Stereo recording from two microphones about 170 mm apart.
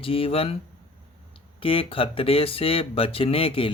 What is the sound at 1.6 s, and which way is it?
Speech, 35° left (ahead or behind).